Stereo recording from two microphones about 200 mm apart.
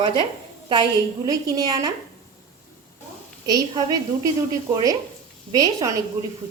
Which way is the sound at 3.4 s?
20° right (ahead or behind).